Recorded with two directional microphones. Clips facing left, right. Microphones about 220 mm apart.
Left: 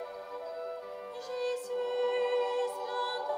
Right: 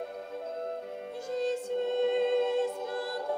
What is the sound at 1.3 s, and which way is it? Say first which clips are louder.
Music: right 3 dB; 25° right (ahead or behind).